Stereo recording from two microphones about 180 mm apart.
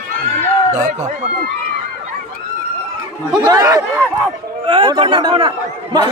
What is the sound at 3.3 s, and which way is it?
Speech, 20° right (ahead or behind).